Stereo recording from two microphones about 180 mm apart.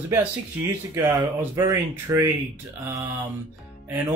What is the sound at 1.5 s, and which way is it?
Speech, 20° right (ahead or behind).